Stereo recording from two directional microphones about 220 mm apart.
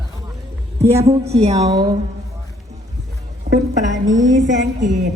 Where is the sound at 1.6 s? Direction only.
20° right (ahead or behind).